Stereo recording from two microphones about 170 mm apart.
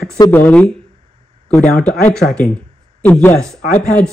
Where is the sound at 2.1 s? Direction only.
5° left (ahead or behind).